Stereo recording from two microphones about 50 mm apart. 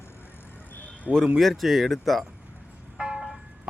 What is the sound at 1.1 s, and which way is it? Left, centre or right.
Speech, centre.